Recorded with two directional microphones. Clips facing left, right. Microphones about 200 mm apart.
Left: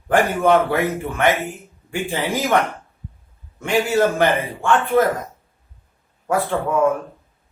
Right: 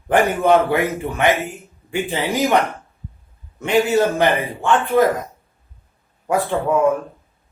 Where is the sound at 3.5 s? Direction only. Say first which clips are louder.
Right 2 dB; 20° right (ahead or behind).